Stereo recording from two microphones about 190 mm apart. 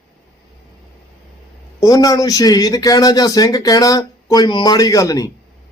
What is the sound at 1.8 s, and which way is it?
A man's voice, 20° left (ahead or behind).